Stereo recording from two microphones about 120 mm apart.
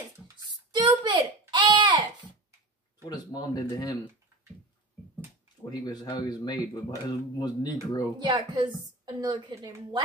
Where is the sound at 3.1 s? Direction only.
35° left (ahead or behind).